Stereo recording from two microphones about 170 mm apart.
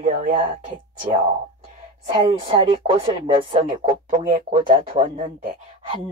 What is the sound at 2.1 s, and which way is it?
Speech, 30° right (ahead or behind).